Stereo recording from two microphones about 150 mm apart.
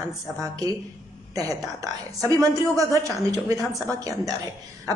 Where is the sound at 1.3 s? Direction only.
25° right (ahead or behind).